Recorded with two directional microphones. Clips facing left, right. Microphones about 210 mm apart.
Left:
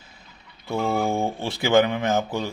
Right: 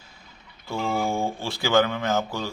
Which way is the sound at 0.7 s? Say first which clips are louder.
Left 3 dB; 20° left (ahead or behind).